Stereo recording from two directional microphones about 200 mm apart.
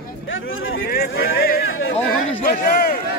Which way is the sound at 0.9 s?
50° left (ahead or behind).